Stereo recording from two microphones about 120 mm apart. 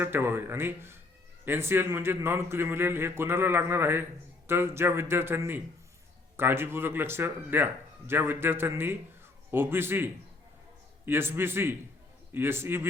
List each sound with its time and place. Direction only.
0.0 s a man's voice: 20° right (ahead or behind)